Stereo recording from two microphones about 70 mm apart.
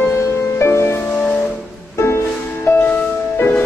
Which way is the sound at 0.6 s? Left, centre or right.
Left.